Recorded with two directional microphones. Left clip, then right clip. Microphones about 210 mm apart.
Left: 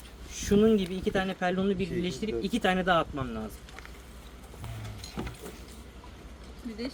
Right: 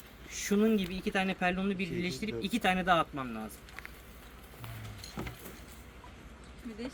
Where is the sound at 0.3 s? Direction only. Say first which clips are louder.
Left 6 dB; 10° right (ahead or behind).